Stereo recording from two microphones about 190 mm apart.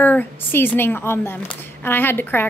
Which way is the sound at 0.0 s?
10° left (ahead or behind).